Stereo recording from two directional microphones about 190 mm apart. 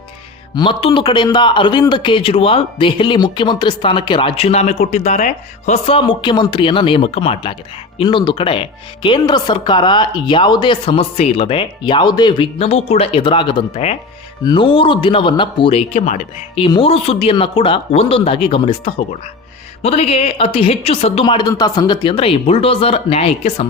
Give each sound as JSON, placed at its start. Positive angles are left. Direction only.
{"t": 0.5, "sound": "a man's voice", "side_deg": 25}